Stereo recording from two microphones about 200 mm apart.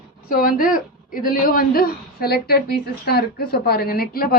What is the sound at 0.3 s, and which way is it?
A woman's voice, 45° left (ahead or behind).